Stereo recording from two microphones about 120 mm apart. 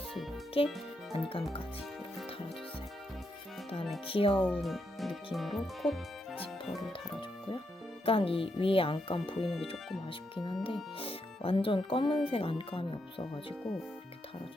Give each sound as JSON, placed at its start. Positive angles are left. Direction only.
{"t": 0.6, "sound": "speech", "side_deg": 50}
{"t": 4.0, "sound": "speech", "side_deg": 50}
{"t": 4.4, "sound": "speech", "side_deg": 15}
{"t": 4.6, "sound": "speech", "side_deg": 0}
{"t": 8.0, "sound": "speech", "side_deg": 50}